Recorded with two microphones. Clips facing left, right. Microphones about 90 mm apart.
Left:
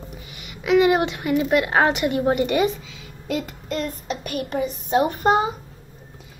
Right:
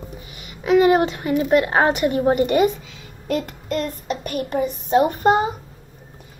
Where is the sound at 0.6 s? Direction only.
35° right (ahead or behind).